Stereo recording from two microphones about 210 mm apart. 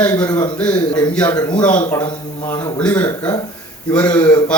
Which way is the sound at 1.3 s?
20° left (ahead or behind).